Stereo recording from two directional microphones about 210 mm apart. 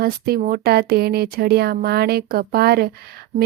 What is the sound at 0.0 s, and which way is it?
Speech, 45° right (ahead or behind).